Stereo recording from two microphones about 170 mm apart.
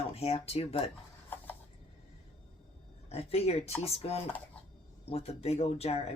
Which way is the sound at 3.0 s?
35° left (ahead or behind).